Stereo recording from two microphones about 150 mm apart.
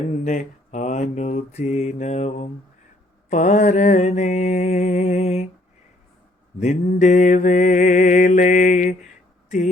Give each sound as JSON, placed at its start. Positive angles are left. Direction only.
{"t": 0.3, "sound": "mantra", "side_deg": 55}
{"t": 6.6, "sound": "mantra", "side_deg": 50}